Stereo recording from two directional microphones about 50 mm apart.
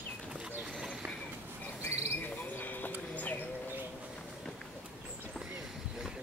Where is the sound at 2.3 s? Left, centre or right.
Left.